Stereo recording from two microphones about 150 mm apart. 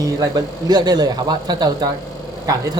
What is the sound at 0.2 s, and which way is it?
Speech, 25° right (ahead or behind).